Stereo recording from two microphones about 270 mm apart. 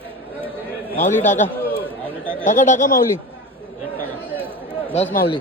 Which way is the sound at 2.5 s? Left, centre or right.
Left.